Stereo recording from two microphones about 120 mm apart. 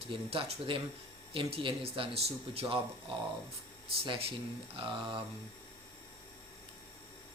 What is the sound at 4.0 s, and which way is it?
Speech, 50° right (ahead or behind).